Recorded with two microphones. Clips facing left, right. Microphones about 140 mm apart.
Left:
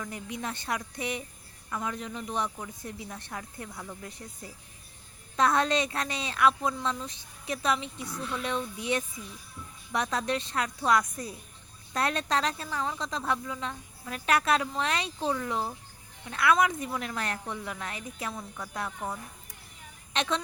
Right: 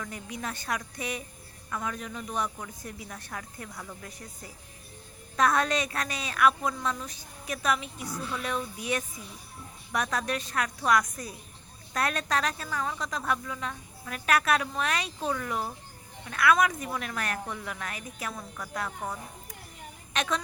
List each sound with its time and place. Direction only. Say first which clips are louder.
0.0 s speech: left 1 dB; 25° left (ahead or behind)
5.4 s speech: even; 25° left (ahead or behind)
8.0 s speech: right 1 dB; centre (ahead or behind)
8.8 s speech: left 1 dB; 25° left (ahead or behind)
20.1 s speech: even; 25° left (ahead or behind)